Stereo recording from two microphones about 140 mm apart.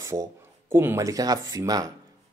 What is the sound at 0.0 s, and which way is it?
Speech, 25° right (ahead or behind).